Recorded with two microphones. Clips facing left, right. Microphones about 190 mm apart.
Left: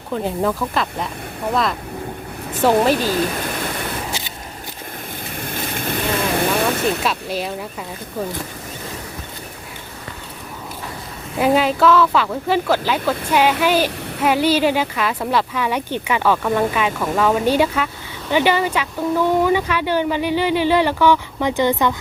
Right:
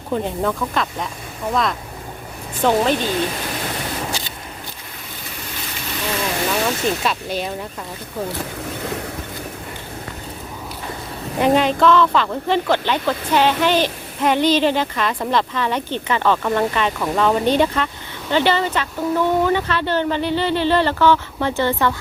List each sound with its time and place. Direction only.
0.3 s speech: centre (ahead or behind)
2.6 s speech: 5° left (ahead or behind)
5.4 s vehicle: 55° left (ahead or behind)
7.0 s speech: centre (ahead or behind)
11.3 s speech: 5° left (ahead or behind)